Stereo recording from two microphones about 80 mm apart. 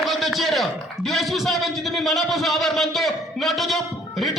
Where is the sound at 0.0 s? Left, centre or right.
Centre.